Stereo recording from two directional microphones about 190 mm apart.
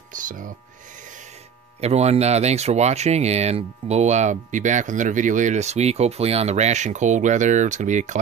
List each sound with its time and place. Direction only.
0.1 s speech: 45° right (ahead or behind)
1.8 s speech: 35° right (ahead or behind)